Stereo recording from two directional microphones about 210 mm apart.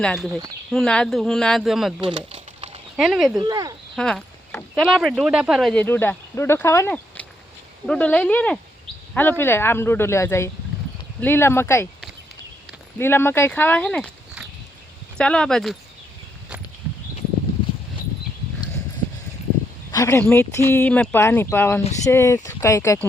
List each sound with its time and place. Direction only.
0.0 s speech: 5° left (ahead or behind)
0.3 s speech: 15° right (ahead or behind)
0.7 s speech: 5° left (ahead or behind)
2.1 s a sound: 30° right (ahead or behind)
2.9 s speech: centre (ahead or behind)
3.4 s speech: 20° right (ahead or behind)
3.9 s speech: 5° left (ahead or behind)
15.2 s speech: 5° left (ahead or behind)
19.9 s speech: 15° left (ahead or behind)